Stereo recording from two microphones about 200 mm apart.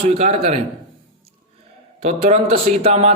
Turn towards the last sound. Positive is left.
turn(degrees=-30)  # may be behind; listen again after turning